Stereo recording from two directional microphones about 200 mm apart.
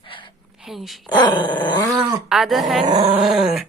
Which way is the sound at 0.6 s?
Centre (ahead or behind).